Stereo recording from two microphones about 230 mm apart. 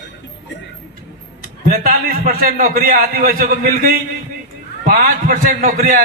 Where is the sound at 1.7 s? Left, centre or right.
Right.